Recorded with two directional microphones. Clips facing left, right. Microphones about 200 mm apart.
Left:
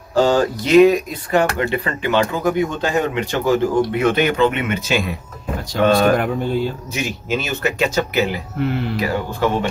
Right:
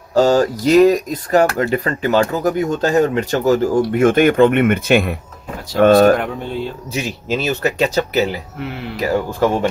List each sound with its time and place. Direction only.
0.1 s speech: 40° right (ahead or behind)
6.1 s speech: centre (ahead or behind)
6.9 s speech: 35° right (ahead or behind)
8.5 s speech: centre (ahead or behind)
9.0 s speech: 45° right (ahead or behind)